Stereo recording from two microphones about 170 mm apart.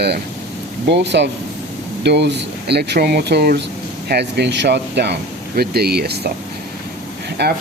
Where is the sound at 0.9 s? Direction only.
90° right.